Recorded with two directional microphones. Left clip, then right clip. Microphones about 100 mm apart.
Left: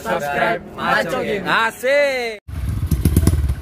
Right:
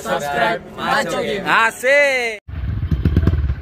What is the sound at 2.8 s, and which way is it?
Motorcycle, 30° left (ahead or behind).